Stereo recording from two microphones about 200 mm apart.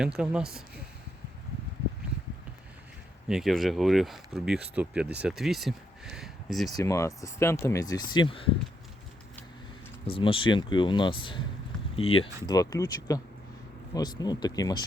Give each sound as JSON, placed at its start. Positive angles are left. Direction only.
{"t": 0.0, "sound": "speech", "side_deg": -5}
{"t": 3.2, "sound": "speech", "side_deg": 0}
{"t": 6.7, "sound": "speech", "side_deg": 15}
{"t": 10.1, "sound": "speech", "side_deg": 25}
{"t": 12.5, "sound": "speech", "side_deg": 15}